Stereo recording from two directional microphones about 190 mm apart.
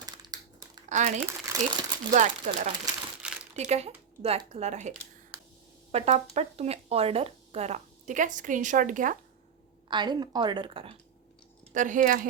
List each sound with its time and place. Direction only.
0.0 s a sound: 20° right (ahead or behind)
0.9 s speech: 40° right (ahead or behind)
1.2 s speech: 15° right (ahead or behind)
2.5 s a woman's voice: 40° right (ahead or behind)
9.9 s a woman's voice: 20° right (ahead or behind)
11.7 s speech: 40° right (ahead or behind)